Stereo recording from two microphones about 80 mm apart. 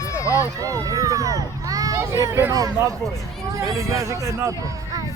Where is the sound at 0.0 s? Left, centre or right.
Left.